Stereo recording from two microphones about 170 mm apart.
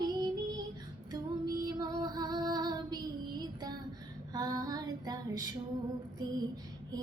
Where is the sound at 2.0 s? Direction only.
25° right (ahead or behind).